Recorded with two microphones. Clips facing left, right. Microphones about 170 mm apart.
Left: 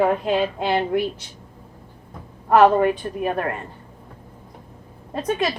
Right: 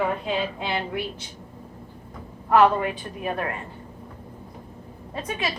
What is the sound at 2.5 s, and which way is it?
Speech, 50° left (ahead or behind).